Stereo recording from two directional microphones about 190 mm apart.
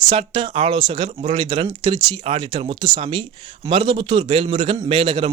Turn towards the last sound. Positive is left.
turn(degrees=-25)  # may be behind; listen again after turning